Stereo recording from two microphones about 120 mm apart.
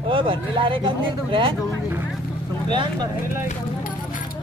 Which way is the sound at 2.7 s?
40° right (ahead or behind).